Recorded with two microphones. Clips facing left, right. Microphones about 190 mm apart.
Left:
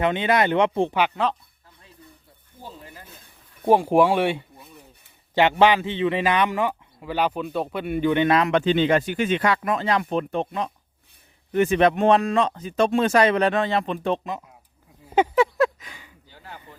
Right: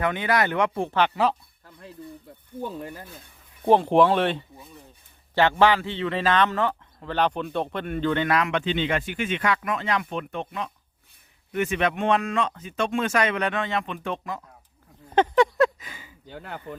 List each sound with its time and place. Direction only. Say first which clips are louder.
0.0 s speech: left 3 dB; 25° left (ahead or behind)
1.1 s speech: right 1 dB; 5° right (ahead or behind)
2.6 s speech: right 9 dB; 60° right (ahead or behind)
3.7 s a man's voice: left 1 dB; 10° left (ahead or behind)
4.5 s a sound: right 1 dB; centre (ahead or behind)
5.3 s a man's voice: left 2 dB; 15° left (ahead or behind)
8.4 s speech: left 6 dB; 40° left (ahead or behind)
14.3 s speech: left 2 dB; 20° left (ahead or behind)
15.0 s a sound: even; 10° left (ahead or behind)
16.2 s speech: right 8 dB; 60° right (ahead or behind)